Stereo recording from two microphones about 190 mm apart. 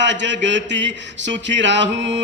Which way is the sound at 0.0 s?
70° right (ahead or behind).